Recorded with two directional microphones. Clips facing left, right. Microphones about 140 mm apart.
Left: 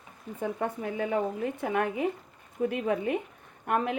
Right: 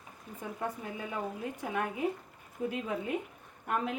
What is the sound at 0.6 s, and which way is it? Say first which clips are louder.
A woman's voice: left 5 dB; 80° left.